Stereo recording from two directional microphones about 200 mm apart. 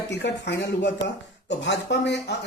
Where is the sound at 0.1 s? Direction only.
60° left (ahead or behind).